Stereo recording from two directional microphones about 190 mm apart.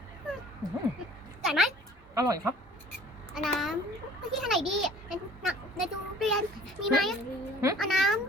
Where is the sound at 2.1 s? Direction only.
15° right (ahead or behind).